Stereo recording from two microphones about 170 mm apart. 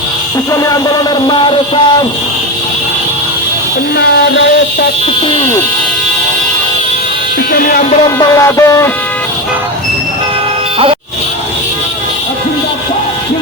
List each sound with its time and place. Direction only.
0.5 s speech: 20° left (ahead or behind)
3.9 s speech: 90° left
7.5 s music: 55° left (ahead or behind)
8.2 s music: 20° left (ahead or behind)